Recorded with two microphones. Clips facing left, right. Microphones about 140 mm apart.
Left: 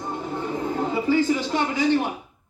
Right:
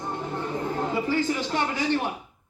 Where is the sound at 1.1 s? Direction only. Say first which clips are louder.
Left 5 dB; 15° left (ahead or behind).